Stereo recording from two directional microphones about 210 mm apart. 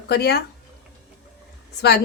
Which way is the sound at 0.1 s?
50° left (ahead or behind).